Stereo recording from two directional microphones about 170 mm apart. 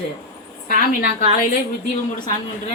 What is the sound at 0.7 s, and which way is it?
Speech, 55° left (ahead or behind).